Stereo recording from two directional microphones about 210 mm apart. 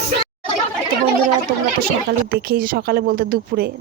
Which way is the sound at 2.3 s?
45° right (ahead or behind).